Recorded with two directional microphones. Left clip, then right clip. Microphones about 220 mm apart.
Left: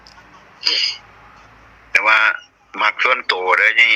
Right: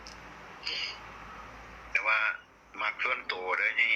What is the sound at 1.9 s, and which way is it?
Radio, 50° left (ahead or behind).